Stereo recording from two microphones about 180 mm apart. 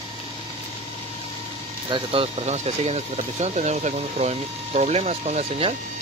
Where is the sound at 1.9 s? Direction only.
30° right (ahead or behind).